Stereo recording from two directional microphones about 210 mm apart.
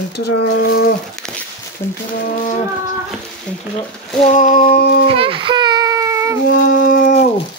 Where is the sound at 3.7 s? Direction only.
30° left (ahead or behind); by 5.0 s 50° left (ahead or behind).